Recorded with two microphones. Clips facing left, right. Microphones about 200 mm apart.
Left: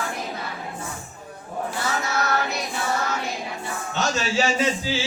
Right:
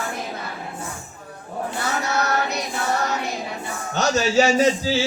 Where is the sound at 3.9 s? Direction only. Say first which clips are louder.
Right 6 dB; 40° right (ahead or behind).